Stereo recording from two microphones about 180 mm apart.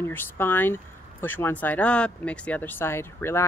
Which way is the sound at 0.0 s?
10° left (ahead or behind).